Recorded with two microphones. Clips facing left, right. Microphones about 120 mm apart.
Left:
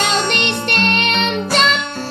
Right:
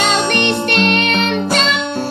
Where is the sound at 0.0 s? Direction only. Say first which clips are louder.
Right 3 dB; 35° right (ahead or behind).